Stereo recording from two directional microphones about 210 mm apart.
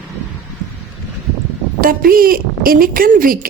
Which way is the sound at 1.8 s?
45° right (ahead or behind).